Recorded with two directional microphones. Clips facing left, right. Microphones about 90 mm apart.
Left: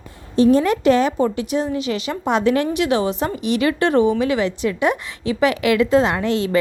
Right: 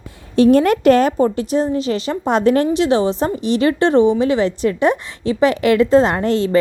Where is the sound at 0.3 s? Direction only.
65° right (ahead or behind).